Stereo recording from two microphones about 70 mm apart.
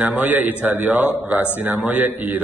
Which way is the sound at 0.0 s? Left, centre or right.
Right.